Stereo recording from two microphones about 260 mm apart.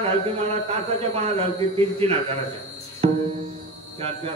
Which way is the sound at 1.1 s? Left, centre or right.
Right.